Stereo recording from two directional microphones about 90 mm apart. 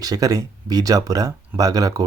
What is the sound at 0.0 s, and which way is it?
Speech, 45° right (ahead or behind).